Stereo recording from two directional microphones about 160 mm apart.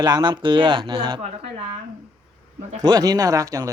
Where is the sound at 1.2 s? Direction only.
45° right (ahead or behind).